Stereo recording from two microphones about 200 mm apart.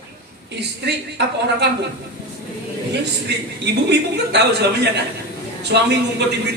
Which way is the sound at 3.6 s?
55° right (ahead or behind).